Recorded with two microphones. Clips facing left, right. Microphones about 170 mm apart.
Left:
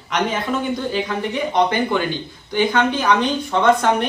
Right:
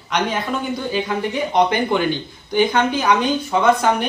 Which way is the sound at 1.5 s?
15° right (ahead or behind).